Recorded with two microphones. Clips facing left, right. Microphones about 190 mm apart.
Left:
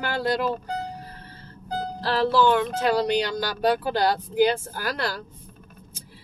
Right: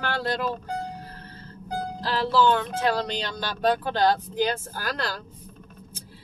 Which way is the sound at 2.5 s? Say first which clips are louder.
Left 2 dB; 10° left (ahead or behind).